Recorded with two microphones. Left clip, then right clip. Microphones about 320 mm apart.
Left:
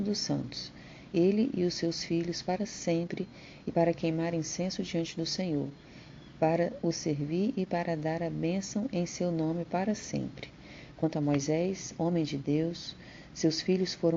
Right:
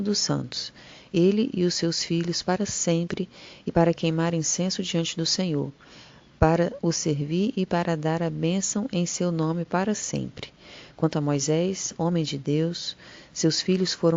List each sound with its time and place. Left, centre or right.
0.0 s a woman's voice: right